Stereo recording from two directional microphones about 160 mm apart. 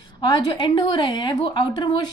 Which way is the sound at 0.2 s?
30° left (ahead or behind).